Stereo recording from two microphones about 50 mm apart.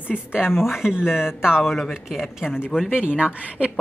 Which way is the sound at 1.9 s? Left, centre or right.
Centre.